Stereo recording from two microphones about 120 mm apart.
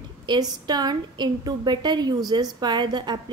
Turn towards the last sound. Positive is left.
turn(degrees=-40)  # may be behind; listen again after turning